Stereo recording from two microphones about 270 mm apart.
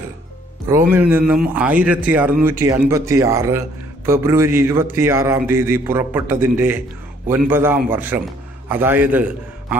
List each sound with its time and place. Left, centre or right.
0.7 s a man's voice: centre